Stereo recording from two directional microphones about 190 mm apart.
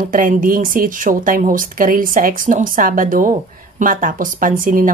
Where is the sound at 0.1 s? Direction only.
45° right (ahead or behind).